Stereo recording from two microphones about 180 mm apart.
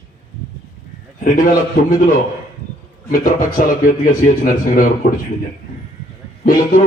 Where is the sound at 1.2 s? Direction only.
50° left (ahead or behind).